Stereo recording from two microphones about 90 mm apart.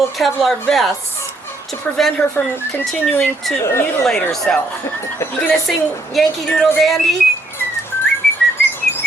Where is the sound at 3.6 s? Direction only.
30° left (ahead or behind).